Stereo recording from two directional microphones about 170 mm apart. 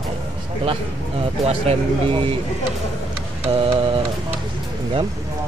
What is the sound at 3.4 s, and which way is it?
Speech, 35° right (ahead or behind).